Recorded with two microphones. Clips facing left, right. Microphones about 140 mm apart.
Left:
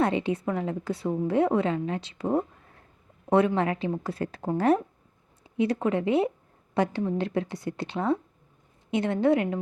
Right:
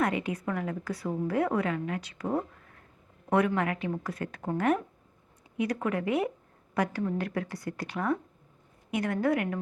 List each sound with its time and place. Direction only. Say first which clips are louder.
0.0 s a woman's voice: left 4 dB; 30° left (ahead or behind)